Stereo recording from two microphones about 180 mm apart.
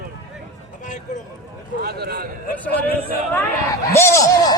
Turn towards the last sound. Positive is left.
turn(degrees=15)  # may be behind; listen again after turning